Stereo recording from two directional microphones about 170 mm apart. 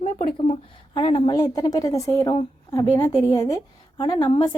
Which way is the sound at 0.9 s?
30° left (ahead or behind).